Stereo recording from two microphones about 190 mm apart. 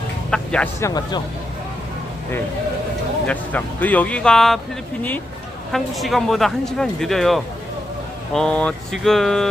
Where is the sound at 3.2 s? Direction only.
10° left (ahead or behind).